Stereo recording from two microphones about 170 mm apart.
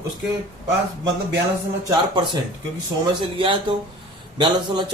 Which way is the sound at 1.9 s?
25° right (ahead or behind).